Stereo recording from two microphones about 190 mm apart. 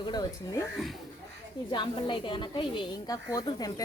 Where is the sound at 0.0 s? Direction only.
20° left (ahead or behind).